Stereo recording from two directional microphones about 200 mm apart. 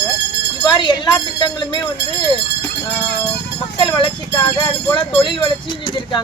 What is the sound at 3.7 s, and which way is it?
Speech, 25° left (ahead or behind).